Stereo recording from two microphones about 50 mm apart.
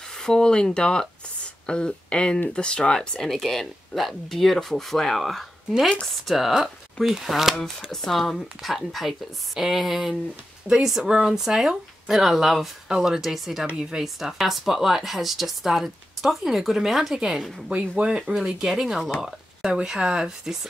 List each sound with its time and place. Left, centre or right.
0.1 s speech: centre
7.9 s speech: centre
14.0 s speech: centre
17.6 s speech: right
18.3 s speech: centre